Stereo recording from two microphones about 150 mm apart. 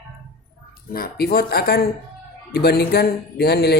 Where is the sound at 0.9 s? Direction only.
90° left.